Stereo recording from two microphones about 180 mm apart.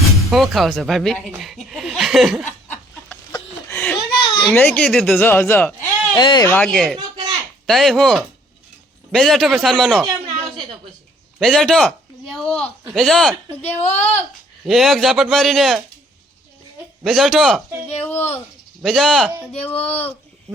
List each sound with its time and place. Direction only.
0.3 s a man's voice: centre (ahead or behind)
1.4 s snicker: centre (ahead or behind)
3.7 s a sound: 10° left (ahead or behind)
4.2 s a sound: 25° left (ahead or behind)
4.5 s speech: 10° left (ahead or behind)
6.1 s speech: 25° left (ahead or behind)
6.5 s a man's voice: 5° left (ahead or behind)
10.0 s a sound: 25° right (ahead or behind)
11.3 s a man's voice: centre (ahead or behind)
13.7 s speech: 35° left (ahead or behind)
14.6 s a man's voice: centre (ahead or behind)
17.0 s a man's voice: centre (ahead or behind)
18.8 s a man's voice: centre (ahead or behind)